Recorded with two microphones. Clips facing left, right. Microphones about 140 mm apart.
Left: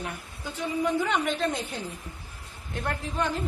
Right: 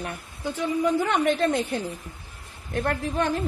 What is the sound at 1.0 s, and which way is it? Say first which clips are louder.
A woman's voice: right 4 dB; 55° right (ahead or behind).